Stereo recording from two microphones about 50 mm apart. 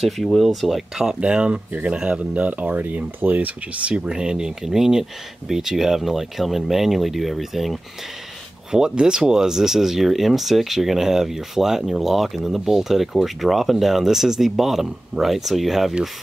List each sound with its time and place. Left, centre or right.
0.4 s speech: centre
1.2 s speech: right; by 7.8 s centre
8.7 s speech: centre